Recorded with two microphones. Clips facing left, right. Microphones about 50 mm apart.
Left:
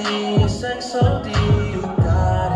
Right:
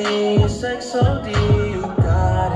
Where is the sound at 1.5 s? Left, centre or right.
Centre.